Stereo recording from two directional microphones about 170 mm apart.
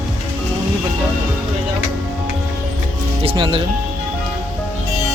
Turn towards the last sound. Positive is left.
turn(degrees=-30)  # may be behind; listen again after turning